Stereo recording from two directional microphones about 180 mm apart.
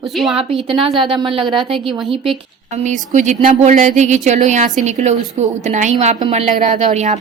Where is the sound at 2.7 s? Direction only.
40° right (ahead or behind).